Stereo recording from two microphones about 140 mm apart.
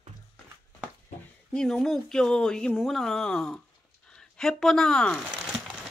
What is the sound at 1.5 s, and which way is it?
Speech, 5° left (ahead or behind).